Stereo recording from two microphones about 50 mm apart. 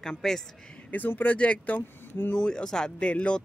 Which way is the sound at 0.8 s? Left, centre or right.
Left.